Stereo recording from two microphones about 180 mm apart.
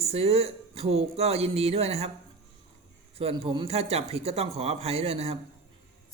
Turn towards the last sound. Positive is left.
turn(degrees=-35)  # may be behind; listen again after turning